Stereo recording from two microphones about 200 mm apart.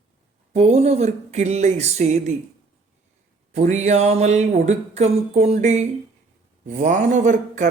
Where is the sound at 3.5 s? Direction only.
35° right (ahead or behind).